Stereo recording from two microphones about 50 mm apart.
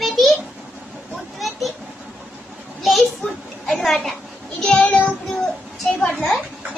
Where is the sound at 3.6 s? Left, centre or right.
Centre.